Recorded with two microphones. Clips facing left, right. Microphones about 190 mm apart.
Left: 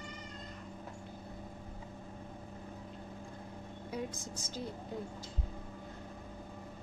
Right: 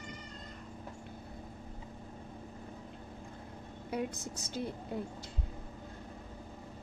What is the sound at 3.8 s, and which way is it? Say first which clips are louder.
Speech: right 4 dB; 65° right (ahead or behind).